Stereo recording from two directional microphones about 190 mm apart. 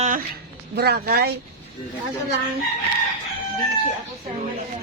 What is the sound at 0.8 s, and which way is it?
Speech, 55° right (ahead or behind).